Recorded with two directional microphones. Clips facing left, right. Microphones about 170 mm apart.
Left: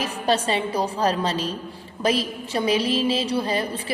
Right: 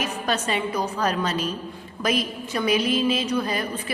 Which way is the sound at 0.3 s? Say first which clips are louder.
Left 4 dB; 30° left (ahead or behind).